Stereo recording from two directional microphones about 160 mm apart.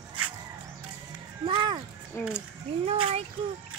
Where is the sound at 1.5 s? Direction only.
30° right (ahead or behind).